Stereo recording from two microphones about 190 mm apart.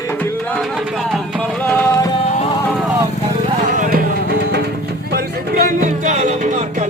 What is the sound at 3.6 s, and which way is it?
Music, 45° right (ahead or behind).